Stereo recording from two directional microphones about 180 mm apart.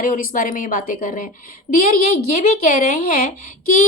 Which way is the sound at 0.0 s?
50° left (ahead or behind).